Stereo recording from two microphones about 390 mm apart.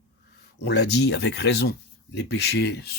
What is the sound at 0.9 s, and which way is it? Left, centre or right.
Speech, left.